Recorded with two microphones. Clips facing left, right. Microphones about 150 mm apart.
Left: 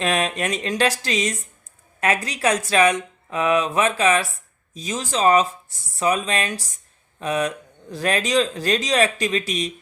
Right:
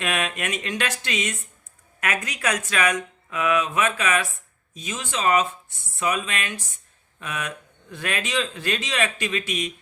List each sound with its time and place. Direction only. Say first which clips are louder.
0.0 s speech: left 5 dB; 35° left (ahead or behind)